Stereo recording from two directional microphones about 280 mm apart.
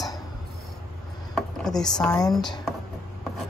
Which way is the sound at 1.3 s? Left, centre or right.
Centre.